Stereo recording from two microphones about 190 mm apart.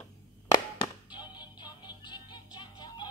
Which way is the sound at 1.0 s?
25° left (ahead or behind).